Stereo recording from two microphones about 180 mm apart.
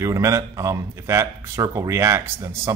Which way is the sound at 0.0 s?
15° right (ahead or behind).